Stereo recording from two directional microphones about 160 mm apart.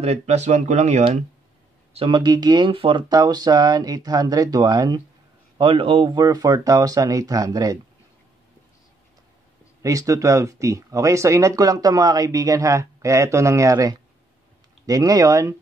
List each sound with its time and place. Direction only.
0.0 s speech: 40° right (ahead or behind)
2.0 s speech: 30° right (ahead or behind)
9.8 s speech: 20° right (ahead or behind)